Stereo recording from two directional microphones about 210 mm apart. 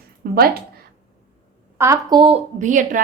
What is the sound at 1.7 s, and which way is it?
A woman's voice, 15° right (ahead or behind).